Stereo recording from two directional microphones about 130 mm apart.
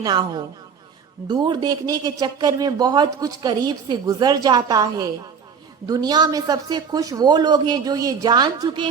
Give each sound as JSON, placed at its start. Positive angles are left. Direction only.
{"t": 0.0, "sound": "speech", "side_deg": -35}